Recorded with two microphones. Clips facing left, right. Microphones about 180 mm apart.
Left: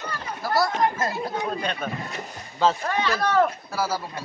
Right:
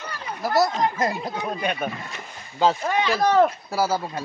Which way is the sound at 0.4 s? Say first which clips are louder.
Right 2 dB; 20° right (ahead or behind).